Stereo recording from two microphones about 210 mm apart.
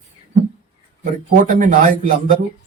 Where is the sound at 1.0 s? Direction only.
40° right (ahead or behind).